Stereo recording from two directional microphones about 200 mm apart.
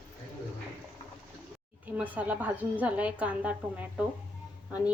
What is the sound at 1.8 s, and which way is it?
A woman's voice, 10° right (ahead or behind).